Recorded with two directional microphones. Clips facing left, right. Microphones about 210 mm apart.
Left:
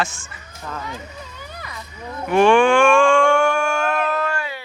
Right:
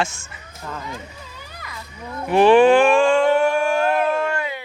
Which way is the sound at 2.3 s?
35° right (ahead or behind).